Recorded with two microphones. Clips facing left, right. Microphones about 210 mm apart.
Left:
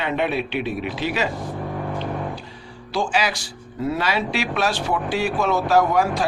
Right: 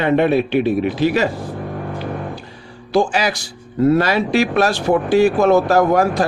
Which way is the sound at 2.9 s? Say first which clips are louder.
Right 6 dB; 45° right (ahead or behind).